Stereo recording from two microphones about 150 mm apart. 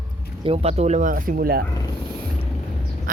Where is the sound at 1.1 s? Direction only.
80° right.